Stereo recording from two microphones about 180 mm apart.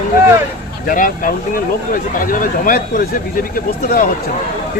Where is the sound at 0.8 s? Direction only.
50° left (ahead or behind).